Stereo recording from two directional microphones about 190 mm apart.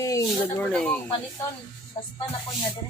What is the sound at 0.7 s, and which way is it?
Speech, 5° left (ahead or behind).